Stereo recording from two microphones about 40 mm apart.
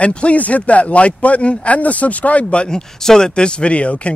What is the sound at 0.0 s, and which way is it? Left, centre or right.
Speech, left.